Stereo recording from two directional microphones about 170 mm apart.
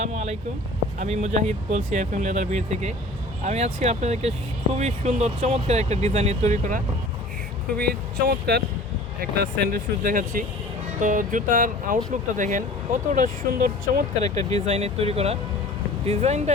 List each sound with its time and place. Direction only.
0.0 s a sound: 40° right (ahead or behind)
0.9 s speech: 40° right (ahead or behind)
7.8 s speech: 65° right (ahead or behind)
14.3 s speech: 40° right (ahead or behind)